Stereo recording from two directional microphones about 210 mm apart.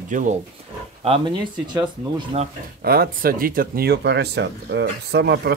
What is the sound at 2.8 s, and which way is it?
Speech, 50° right (ahead or behind).